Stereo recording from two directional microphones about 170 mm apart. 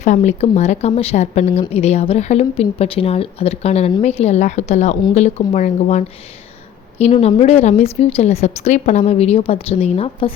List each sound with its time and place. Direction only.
0.0 s a woman's voice: 45° left (ahead or behind)
7.2 s a woman's voice: 40° left (ahead or behind)